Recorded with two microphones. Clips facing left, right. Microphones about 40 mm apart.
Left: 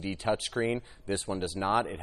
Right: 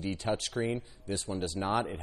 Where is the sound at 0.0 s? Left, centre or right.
Centre.